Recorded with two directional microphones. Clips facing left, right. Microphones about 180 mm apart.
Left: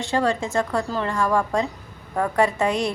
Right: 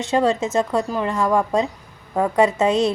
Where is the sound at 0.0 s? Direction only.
20° right (ahead or behind).